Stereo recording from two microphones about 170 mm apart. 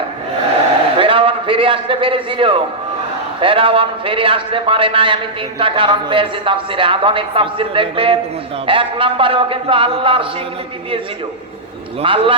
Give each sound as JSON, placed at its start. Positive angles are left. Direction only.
{"t": 0.9, "sound": "a man's voice", "side_deg": -30}
{"t": 12.0, "sound": "a man's voice", "side_deg": -30}